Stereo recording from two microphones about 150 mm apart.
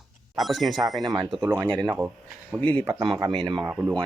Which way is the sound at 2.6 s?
10° left (ahead or behind).